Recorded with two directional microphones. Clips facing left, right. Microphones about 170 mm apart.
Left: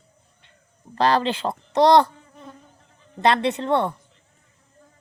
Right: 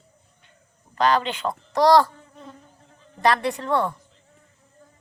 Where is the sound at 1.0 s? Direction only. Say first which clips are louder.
Left 1 dB; 35° left (ahead or behind).